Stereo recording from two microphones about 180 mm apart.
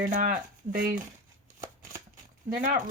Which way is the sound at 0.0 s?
55° right (ahead or behind).